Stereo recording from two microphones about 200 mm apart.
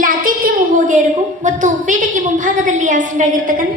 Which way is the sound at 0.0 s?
45° right (ahead or behind).